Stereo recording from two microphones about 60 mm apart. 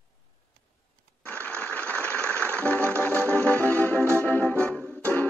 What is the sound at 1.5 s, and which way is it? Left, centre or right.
Music, left.